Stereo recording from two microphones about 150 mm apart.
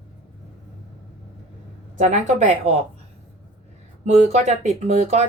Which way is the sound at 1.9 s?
55° right (ahead or behind).